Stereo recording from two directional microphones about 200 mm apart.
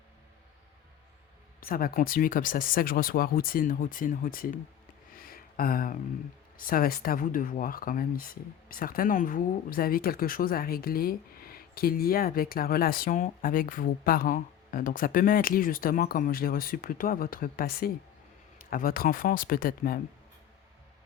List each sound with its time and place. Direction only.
1.6 s speech: 45° left (ahead or behind)
5.1 s a sound: 45° left (ahead or behind)
6.6 s speech: 45° left (ahead or behind)